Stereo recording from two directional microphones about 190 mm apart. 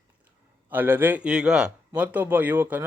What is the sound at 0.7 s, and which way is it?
Speech, 10° right (ahead or behind).